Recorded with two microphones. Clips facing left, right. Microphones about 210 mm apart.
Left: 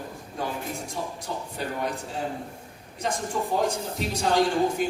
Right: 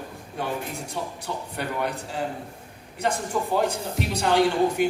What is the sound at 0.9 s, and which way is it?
A man's voice, 65° right (ahead or behind).